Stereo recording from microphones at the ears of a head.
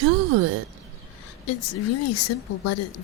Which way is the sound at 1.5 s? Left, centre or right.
Left.